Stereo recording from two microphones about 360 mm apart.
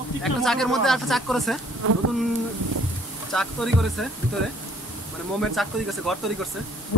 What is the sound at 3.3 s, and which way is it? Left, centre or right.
Speech, centre.